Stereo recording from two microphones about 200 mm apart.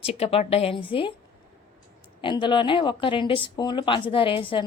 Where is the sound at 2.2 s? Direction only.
25° left (ahead or behind).